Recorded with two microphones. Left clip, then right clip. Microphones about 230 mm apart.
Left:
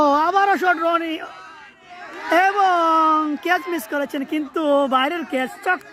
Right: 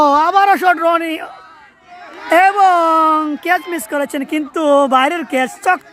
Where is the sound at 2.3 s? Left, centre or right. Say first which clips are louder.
Right 6 dB; right.